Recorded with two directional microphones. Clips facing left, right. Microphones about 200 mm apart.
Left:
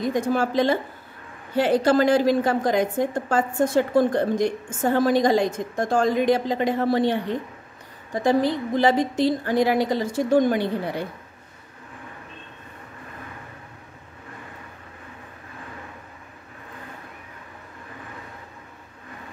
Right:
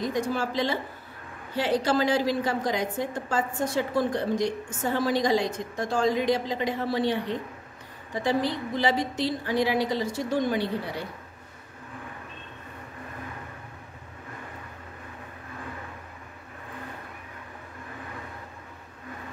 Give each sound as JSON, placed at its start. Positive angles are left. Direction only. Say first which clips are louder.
{"t": 0.1, "sound": "a woman's voice", "louder": "left 5 dB", "side_deg": 50}